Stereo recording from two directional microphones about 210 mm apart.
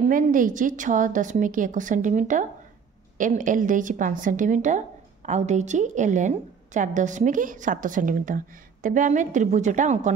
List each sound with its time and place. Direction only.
0.1 s a woman's voice: 40° right (ahead or behind)